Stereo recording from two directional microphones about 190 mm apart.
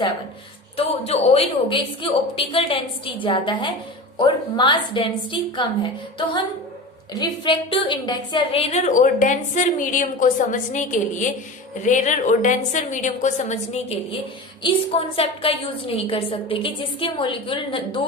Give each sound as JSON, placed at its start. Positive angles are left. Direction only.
{"t": 0.8, "sound": "a woman's voice", "side_deg": 30}
{"t": 7.1, "sound": "a woman's voice", "side_deg": 25}
{"t": 8.7, "sound": "a woman's voice", "side_deg": 40}
{"t": 14.6, "sound": "a woman's voice", "side_deg": 30}